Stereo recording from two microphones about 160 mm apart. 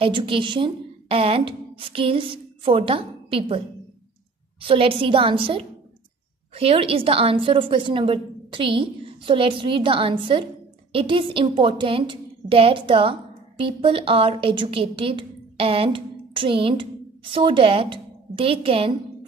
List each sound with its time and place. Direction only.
0.0 s a woman's voice: 30° right (ahead or behind)